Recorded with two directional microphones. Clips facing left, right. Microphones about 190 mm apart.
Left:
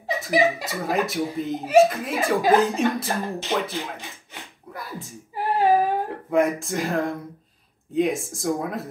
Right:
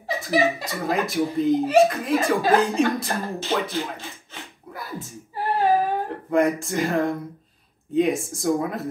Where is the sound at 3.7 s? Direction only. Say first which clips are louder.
Right 3 dB; 15° left (ahead or behind).